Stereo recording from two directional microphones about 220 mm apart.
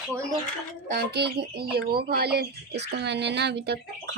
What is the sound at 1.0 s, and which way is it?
Speech, 50° right (ahead or behind).